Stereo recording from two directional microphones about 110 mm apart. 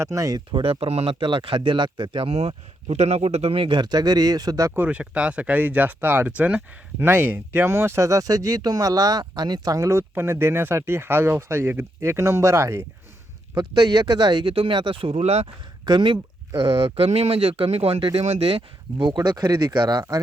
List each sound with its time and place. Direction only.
0.0 s speech: 30° right (ahead or behind)
0.5 s speech: 50° right (ahead or behind)
1.2 s speech: 50° right (ahead or behind); by 4.7 s 35° right (ahead or behind)
4.7 s speech: 15° right (ahead or behind)
13.6 s speech: 40° right (ahead or behind)
15.1 s speech: 85° right
15.9 s speech: 45° right (ahead or behind)
16.6 s speech: 60° right (ahead or behind)
18.3 s speech: 70° right (ahead or behind)
19.0 s speech: 40° right (ahead or behind)